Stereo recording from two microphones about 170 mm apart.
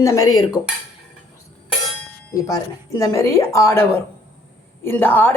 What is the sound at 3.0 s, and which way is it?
Speech, 15° left (ahead or behind).